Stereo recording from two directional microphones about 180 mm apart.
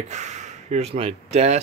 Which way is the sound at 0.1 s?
40° right (ahead or behind).